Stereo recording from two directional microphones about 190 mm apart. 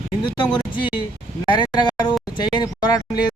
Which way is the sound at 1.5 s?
25° left (ahead or behind).